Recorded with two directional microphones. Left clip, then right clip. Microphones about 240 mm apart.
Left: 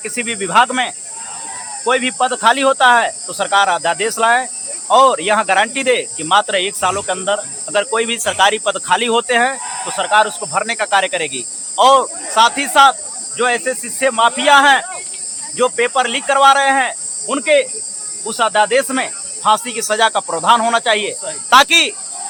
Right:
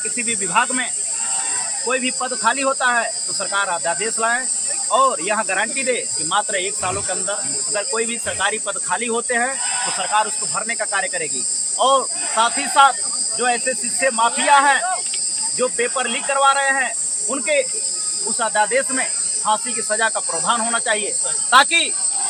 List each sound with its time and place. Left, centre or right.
0.2 s speech: left
1.9 s speech: left